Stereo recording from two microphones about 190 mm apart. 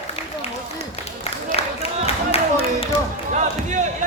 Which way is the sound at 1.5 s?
30° left (ahead or behind).